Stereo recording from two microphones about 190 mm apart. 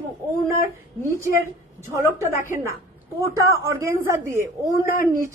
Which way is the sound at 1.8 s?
15° right (ahead or behind).